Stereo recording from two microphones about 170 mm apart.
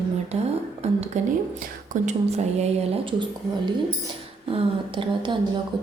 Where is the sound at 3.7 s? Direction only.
30° right (ahead or behind).